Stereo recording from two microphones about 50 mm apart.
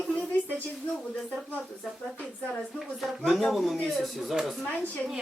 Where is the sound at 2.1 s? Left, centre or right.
Left.